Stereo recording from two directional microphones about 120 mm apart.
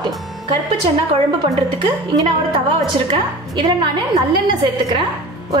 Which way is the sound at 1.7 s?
40° right (ahead or behind).